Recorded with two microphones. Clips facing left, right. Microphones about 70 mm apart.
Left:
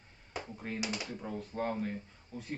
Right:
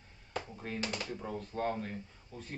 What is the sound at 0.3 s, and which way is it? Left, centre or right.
A man's voice, centre.